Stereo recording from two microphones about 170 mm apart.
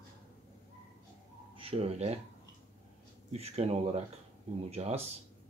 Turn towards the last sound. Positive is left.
turn(degrees=-40)  # may be behind; listen again after turning